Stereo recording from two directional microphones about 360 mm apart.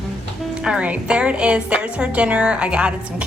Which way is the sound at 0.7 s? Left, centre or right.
Centre.